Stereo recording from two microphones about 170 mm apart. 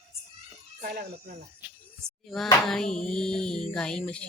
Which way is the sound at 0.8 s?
60° right (ahead or behind).